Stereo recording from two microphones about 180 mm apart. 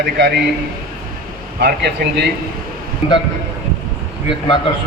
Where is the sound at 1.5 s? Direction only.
65° right (ahead or behind).